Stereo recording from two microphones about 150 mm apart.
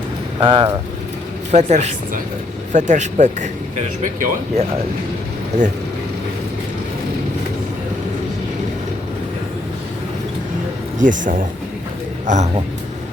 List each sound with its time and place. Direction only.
0.3 s speech: 30° right (ahead or behind)
1.5 s a woman's voice: 50° right (ahead or behind)
11.0 s speech: 60° right (ahead or behind)